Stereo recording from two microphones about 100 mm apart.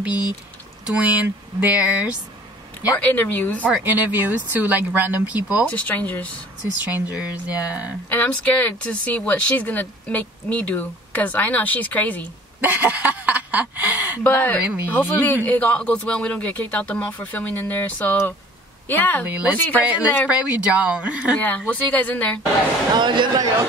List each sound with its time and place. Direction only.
0.0 s speech: 15° right (ahead or behind)
3.0 s speech: 15° left (ahead or behind)
3.7 s speech: 20° right (ahead or behind)
5.7 s speech: 15° left (ahead or behind)
6.8 s speech: 15° right (ahead or behind)
8.1 s speech: 15° left (ahead or behind)
12.5 s speech: 15° right (ahead or behind)
14.2 s speech: 15° left (ahead or behind)
14.6 s speech: 10° right (ahead or behind)
14.9 s speech: 20° left (ahead or behind)
19.2 s speech: 15° right (ahead or behind)
21.4 s speech: 15° left (ahead or behind)
22.9 s a man's voice: 50° right (ahead or behind)